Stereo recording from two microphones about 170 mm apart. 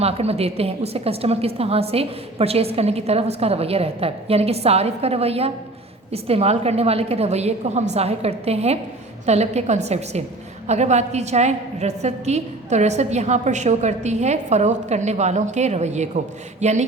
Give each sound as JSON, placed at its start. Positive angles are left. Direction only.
{"t": 0.0, "sound": "a woman's voice", "side_deg": -35}